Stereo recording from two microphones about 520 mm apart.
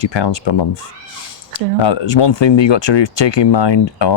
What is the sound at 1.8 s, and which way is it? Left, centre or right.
Speech, left.